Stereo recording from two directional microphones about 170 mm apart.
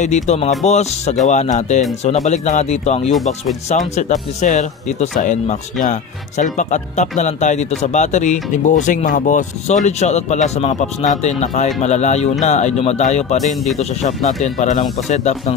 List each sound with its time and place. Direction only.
0.0 s speech: 45° left (ahead or behind)